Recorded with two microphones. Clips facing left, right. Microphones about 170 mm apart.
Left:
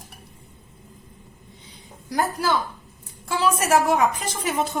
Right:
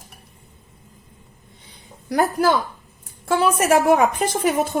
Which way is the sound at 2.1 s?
60° right (ahead or behind).